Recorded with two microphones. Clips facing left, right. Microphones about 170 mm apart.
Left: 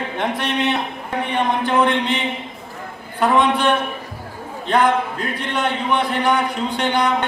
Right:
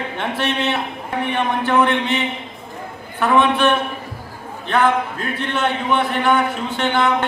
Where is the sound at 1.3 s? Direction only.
15° left (ahead or behind).